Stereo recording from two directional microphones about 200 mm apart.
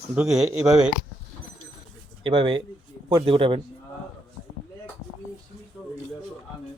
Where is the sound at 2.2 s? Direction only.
25° right (ahead or behind).